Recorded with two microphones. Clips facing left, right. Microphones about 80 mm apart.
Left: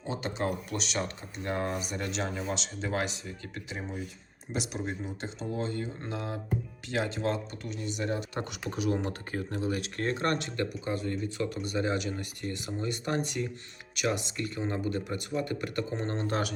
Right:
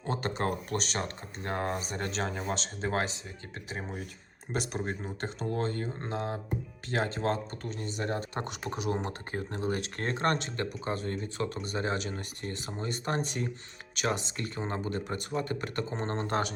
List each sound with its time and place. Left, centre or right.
0.0 s speech: right
4.5 s speech: right